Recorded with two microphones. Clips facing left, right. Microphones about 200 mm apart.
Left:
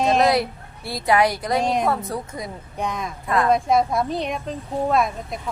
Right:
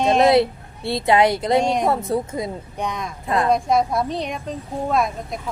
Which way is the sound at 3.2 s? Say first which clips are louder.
Even; 25° right (ahead or behind).